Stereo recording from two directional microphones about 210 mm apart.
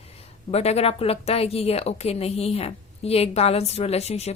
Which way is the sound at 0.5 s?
30° left (ahead or behind).